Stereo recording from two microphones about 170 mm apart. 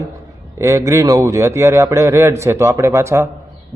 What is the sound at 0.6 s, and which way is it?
A man's voice, 20° right (ahead or behind).